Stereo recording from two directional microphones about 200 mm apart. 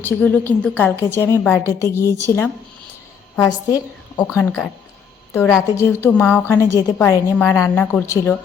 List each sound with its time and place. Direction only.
0.0 s a woman's voice: 10° left (ahead or behind)
5.7 s a woman's voice: 15° left (ahead or behind)